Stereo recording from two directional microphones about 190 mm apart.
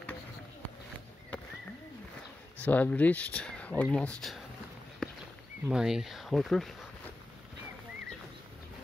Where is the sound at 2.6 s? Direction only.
10° left (ahead or behind).